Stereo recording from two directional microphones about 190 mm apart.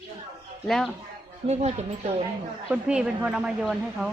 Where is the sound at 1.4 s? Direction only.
35° right (ahead or behind).